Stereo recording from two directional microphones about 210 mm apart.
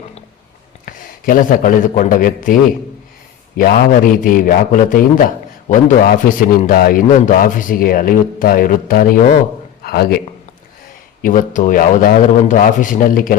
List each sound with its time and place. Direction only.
0.9 s a man's voice: 40° left (ahead or behind)
3.6 s a man's voice: 40° left (ahead or behind)
11.2 s a man's voice: 40° left (ahead or behind)